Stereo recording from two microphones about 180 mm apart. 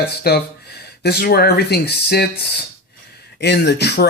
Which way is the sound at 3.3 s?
70° left (ahead or behind).